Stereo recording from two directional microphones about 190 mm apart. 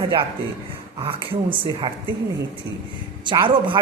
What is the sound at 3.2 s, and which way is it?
Speech, 25° right (ahead or behind).